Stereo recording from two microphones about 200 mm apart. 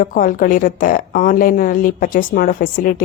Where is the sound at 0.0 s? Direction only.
45° left (ahead or behind).